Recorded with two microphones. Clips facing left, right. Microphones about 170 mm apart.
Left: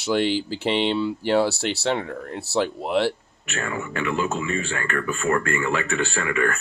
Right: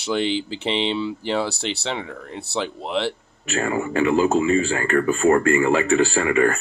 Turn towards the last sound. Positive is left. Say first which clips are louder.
# right 5 dB
turn(degrees=-30)  # may be behind; listen again after turning